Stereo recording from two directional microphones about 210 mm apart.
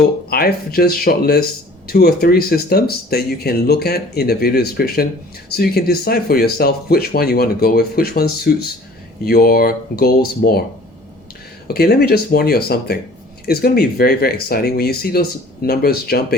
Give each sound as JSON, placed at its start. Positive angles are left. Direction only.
{"t": 0.3, "sound": "speech", "side_deg": 45}
{"t": 11.7, "sound": "speech", "side_deg": 45}